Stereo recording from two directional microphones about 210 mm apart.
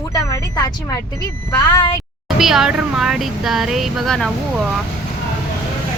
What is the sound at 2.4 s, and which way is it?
Speech, centre (ahead or behind).